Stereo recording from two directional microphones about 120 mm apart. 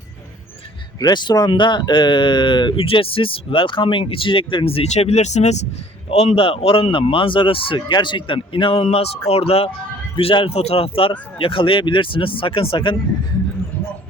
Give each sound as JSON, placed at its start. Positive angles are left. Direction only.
{"t": 0.9, "sound": "speech", "side_deg": 35}
{"t": 6.1, "sound": "speech", "side_deg": 55}